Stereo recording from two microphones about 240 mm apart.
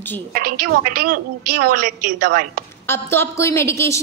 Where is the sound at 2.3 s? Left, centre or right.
Right.